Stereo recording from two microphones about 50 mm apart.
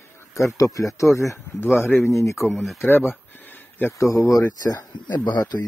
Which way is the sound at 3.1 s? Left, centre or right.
Left.